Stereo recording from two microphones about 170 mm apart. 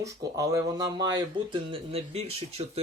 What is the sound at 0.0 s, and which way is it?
Speech, 20° right (ahead or behind).